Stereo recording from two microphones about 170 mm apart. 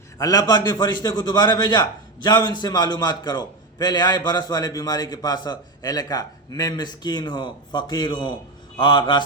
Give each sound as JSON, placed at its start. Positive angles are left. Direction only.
{"t": 0.2, "sound": "a man's voice", "side_deg": 20}